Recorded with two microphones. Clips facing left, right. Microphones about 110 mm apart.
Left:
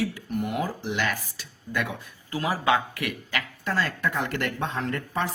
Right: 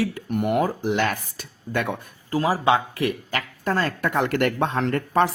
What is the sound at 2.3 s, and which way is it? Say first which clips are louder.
Speech: right 4 dB; 35° right (ahead or behind).